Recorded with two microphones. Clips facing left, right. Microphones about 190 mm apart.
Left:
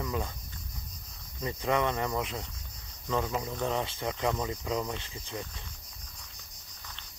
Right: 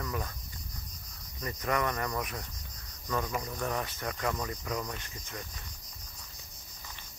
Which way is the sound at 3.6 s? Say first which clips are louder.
Left 4 dB; 25° left (ahead or behind).